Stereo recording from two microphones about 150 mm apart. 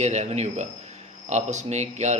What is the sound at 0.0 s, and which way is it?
A man's voice, 50° right (ahead or behind).